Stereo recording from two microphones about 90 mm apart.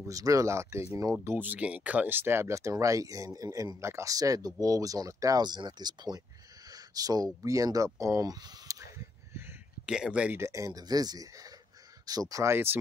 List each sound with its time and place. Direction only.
0.0 s speech: 40° right (ahead or behind)
1.2 s speech: 20° right (ahead or behind); by 6.2 s 50° right (ahead or behind)
6.7 s a sound: 45° right (ahead or behind); by 9.6 s 30° right (ahead or behind)
9.8 s speech: 10° right (ahead or behind)
10.3 s speech: 35° right (ahead or behind)
12.4 s speech: 25° right (ahead or behind)